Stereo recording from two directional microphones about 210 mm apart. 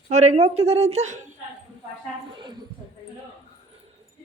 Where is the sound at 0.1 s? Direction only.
35° right (ahead or behind).